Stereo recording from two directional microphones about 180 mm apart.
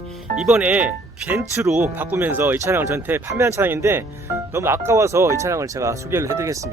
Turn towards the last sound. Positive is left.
turn(degrees=-15)  # may be behind; listen again after turning